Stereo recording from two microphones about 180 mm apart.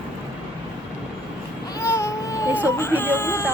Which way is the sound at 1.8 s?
15° left (ahead or behind).